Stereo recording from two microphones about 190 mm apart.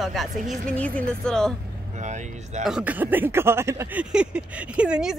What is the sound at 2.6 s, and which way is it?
Speech, 5° right (ahead or behind).